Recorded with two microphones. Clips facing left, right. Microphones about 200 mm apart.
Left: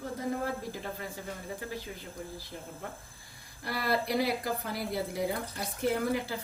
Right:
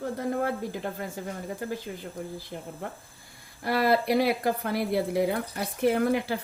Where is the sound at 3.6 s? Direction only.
65° right (ahead or behind).